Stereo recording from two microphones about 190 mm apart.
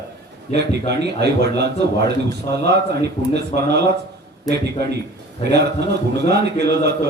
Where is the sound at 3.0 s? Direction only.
60° right (ahead or behind).